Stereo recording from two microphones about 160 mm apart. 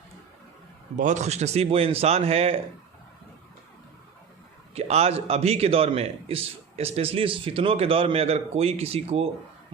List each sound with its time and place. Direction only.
0.9 s a man's voice: 50° right (ahead or behind)
4.7 s a man's voice: 40° right (ahead or behind)